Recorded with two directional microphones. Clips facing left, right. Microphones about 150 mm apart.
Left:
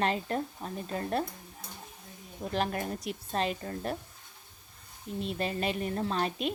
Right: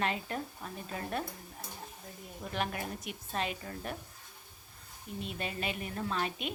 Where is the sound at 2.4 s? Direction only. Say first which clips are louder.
Left 5 dB; 35° left (ahead or behind).